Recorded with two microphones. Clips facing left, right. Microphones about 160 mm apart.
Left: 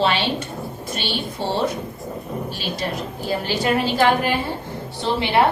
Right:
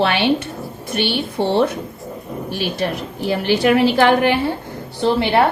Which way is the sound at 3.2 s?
65° right (ahead or behind).